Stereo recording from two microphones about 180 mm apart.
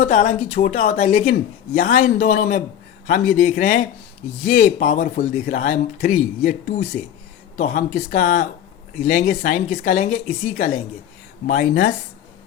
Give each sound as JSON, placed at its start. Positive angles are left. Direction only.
{"t": 0.0, "sound": "speech", "side_deg": 45}